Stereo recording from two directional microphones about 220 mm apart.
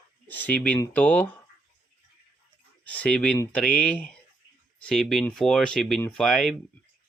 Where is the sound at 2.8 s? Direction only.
5° left (ahead or behind).